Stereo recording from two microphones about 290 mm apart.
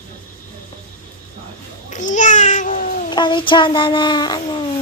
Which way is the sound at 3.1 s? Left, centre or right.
Centre.